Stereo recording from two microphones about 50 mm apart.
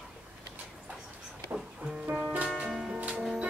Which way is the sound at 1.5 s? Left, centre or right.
Centre.